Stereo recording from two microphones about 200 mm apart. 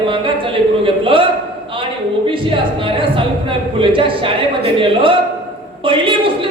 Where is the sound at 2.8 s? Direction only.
25° right (ahead or behind).